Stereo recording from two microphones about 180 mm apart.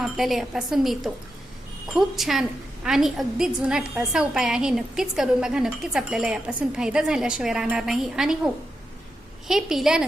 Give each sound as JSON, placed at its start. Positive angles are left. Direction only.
{"t": 0.0, "sound": "a woman's voice", "side_deg": 0}
{"t": 9.5, "sound": "a woman's voice", "side_deg": -5}